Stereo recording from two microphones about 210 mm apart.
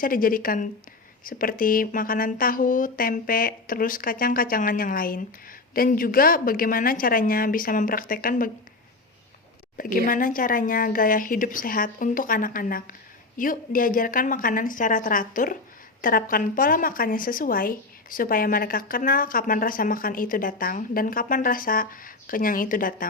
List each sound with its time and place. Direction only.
0.0 s speech: 40° left (ahead or behind)
10.1 s speech: 40° left (ahead or behind)